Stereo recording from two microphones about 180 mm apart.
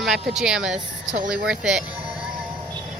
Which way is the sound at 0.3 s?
5° right (ahead or behind).